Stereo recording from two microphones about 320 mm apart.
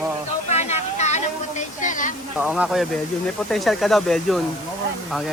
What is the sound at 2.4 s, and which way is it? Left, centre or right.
Speech, centre.